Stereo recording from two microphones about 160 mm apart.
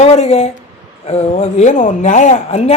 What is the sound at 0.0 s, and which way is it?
Speech, 40° left (ahead or behind).